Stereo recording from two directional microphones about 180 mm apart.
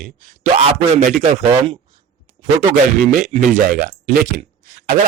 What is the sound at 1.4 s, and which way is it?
Speech, 30° right (ahead or behind).